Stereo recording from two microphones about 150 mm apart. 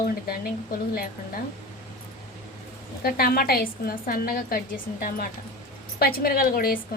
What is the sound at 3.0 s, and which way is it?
A woman's voice, 85° left.